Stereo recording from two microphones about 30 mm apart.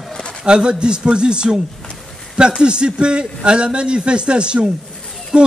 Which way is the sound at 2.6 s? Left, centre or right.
Right.